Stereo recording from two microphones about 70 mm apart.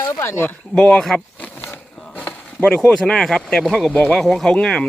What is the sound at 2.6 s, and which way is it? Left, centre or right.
Speech, centre.